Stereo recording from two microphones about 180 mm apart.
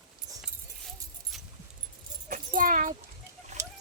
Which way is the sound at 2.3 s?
50° right (ahead or behind).